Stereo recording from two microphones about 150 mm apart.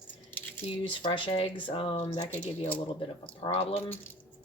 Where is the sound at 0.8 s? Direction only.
35° left (ahead or behind).